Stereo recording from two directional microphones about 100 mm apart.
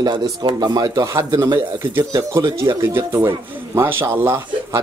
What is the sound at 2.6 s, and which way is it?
A man's voice, 25° right (ahead or behind).